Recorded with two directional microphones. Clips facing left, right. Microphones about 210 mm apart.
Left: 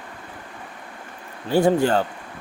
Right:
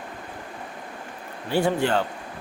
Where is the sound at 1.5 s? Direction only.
40° left (ahead or behind).